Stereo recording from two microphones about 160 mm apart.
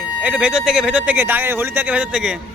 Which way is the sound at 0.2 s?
10° right (ahead or behind).